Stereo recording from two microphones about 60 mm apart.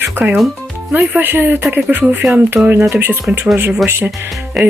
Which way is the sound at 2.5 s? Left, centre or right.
Centre.